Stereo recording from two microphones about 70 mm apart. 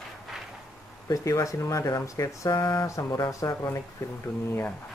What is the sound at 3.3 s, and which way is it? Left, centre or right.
Speech, left.